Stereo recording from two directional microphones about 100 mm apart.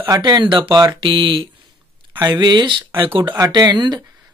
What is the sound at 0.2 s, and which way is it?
Speech, 50° right (ahead or behind).